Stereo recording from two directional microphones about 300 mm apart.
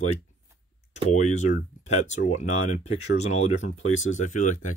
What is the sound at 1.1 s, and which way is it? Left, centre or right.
Speech, left.